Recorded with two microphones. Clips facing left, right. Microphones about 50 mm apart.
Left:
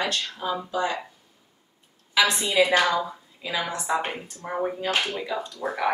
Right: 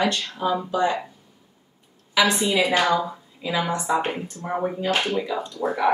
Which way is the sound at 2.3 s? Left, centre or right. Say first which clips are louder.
Even; centre.